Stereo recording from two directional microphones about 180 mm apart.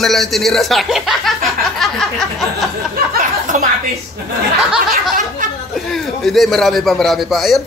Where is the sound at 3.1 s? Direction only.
55° right (ahead or behind).